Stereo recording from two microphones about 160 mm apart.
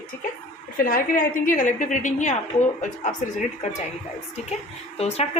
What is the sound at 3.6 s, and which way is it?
Speech, 50° left (ahead or behind).